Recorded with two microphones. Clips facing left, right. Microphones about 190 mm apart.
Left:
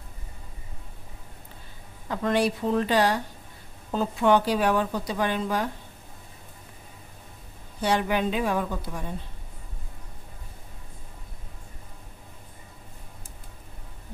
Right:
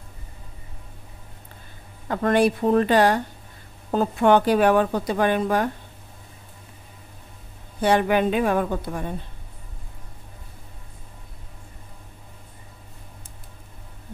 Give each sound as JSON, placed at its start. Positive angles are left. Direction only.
{"t": 2.0, "sound": "a woman's voice", "side_deg": -55}
{"t": 7.8, "sound": "a woman's voice", "side_deg": -55}